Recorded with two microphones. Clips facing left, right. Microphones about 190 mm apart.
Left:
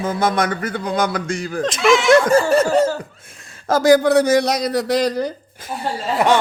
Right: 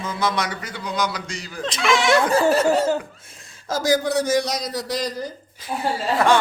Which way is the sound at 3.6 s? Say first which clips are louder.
Left 8 dB; 60° left (ahead or behind).